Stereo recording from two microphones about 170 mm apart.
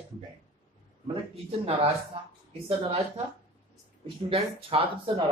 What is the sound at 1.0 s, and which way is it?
Speech, 30° right (ahead or behind).